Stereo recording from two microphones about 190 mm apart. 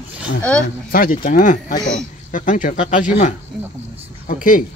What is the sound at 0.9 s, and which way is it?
Speech, 50° left (ahead or behind).